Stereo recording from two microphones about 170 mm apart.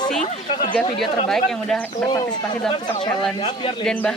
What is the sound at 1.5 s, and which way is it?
Speech, 5° left (ahead or behind).